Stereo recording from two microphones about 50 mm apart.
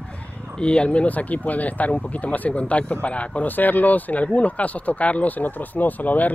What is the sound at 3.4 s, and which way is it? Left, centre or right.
Speech, left.